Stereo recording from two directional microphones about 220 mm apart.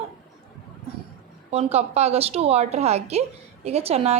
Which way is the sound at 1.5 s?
30° right (ahead or behind).